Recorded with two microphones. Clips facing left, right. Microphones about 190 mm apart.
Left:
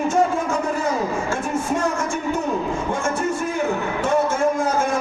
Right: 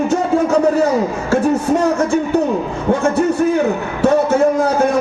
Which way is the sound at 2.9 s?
65° right (ahead or behind).